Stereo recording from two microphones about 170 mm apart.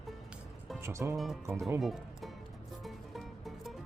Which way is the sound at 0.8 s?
15° right (ahead or behind).